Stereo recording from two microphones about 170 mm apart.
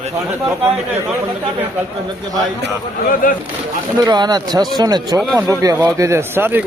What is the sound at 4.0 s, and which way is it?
A man's voice, 25° right (ahead or behind).